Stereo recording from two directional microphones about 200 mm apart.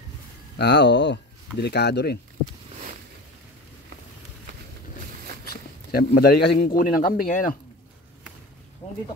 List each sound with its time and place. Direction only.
0.6 s speech: 55° left (ahead or behind)
5.4 s a sound: 50° left (ahead or behind)
6.7 s speech: 45° left (ahead or behind)